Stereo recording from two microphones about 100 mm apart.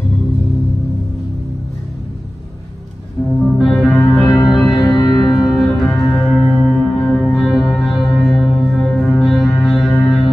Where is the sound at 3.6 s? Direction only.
Centre (ahead or behind).